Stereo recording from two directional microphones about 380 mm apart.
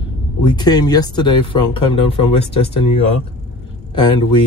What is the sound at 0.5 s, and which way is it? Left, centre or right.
Speech, centre.